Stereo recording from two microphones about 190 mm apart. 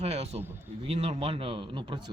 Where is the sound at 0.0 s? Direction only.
35° right (ahead or behind).